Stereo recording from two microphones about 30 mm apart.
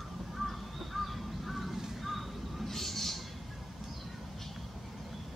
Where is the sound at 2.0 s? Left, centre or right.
Centre.